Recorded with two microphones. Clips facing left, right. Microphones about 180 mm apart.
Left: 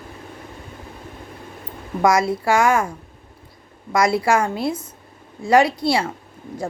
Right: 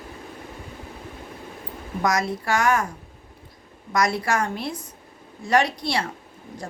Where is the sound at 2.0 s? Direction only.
30° left (ahead or behind).